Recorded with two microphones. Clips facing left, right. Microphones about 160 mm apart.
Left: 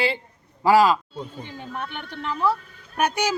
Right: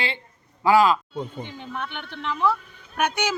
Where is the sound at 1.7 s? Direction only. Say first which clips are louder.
Left 1 dB; 40° left (ahead or behind).